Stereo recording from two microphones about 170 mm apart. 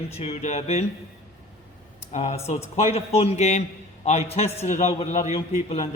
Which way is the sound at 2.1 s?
40° left (ahead or behind).